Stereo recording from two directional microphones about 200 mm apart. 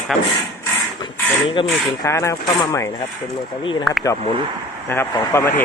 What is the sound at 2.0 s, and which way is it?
Speech, 15° left (ahead or behind).